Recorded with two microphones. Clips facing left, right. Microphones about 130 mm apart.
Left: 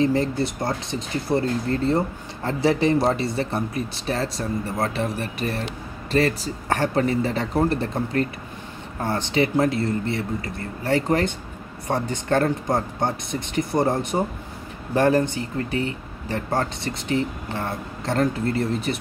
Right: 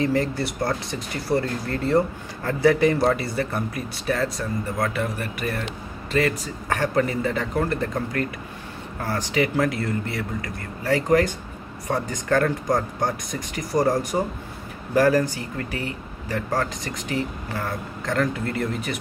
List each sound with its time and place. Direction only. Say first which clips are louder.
0.0 s speech: left 2 dB; 25° left (ahead or behind)